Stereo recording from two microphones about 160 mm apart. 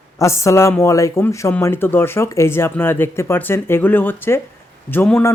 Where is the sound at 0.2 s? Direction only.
20° left (ahead or behind).